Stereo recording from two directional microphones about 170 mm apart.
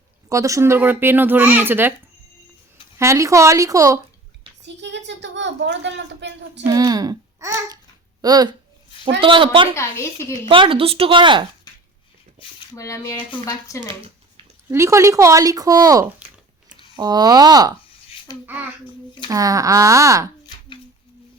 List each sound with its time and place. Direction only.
0.3 s speech: 20° right (ahead or behind)
3.0 s speech: 15° right (ahead or behind)
4.6 s a woman's voice: 90° right
6.7 s speech: 20° right (ahead or behind)
9.7 s speech: 15° left (ahead or behind)
10.4 s speech: 30° right (ahead or behind)
11.7 s a sound: 25° left (ahead or behind)
12.7 s speech: 20° left (ahead or behind)
14.7 s speech: 15° right (ahead or behind)
18.4 s speech: 10° right (ahead or behind)
19.3 s speech: 20° right (ahead or behind)